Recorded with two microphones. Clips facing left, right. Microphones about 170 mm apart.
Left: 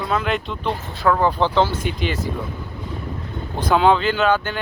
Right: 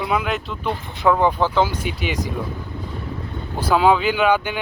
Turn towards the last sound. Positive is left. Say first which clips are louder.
# right 1 dB
turn(degrees=-10)  # may be behind; listen again after turning